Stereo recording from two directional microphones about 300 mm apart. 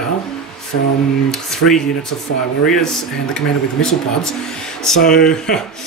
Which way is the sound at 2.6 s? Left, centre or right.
Centre.